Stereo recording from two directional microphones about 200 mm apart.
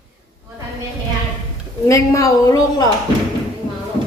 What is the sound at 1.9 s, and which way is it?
A woman's voice, 15° left (ahead or behind).